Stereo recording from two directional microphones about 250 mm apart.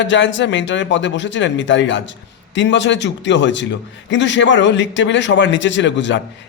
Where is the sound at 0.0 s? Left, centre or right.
Left.